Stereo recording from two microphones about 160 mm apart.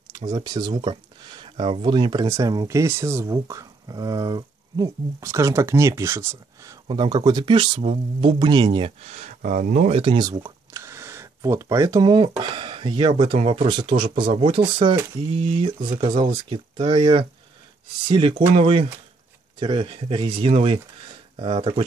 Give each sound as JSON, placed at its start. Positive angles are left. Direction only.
{"t": 0.3, "sound": "speech", "side_deg": -25}